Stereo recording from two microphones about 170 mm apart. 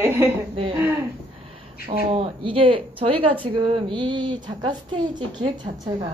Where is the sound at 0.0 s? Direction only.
15° right (ahead or behind).